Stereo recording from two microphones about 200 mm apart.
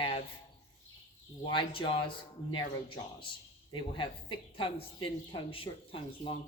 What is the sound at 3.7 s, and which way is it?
Speech, 25° left (ahead or behind).